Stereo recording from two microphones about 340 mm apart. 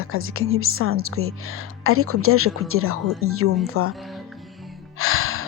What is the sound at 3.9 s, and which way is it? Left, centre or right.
Speech, centre.